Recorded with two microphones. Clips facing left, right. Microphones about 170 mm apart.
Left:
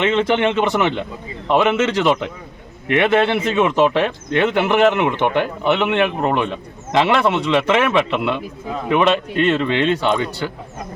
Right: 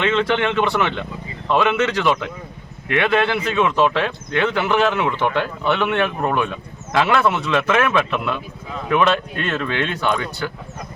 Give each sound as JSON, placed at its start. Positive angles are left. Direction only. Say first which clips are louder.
{"t": 0.0, "sound": "speech", "louder": "left 2 dB", "side_deg": 20}